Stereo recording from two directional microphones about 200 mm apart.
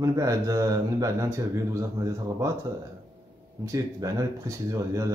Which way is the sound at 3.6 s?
15° right (ahead or behind).